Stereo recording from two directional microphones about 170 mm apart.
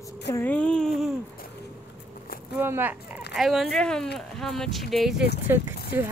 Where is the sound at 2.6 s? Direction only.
10° right (ahead or behind).